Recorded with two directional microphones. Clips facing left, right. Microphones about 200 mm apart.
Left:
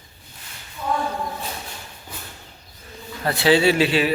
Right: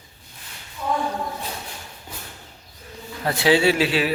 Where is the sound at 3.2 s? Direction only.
10° right (ahead or behind).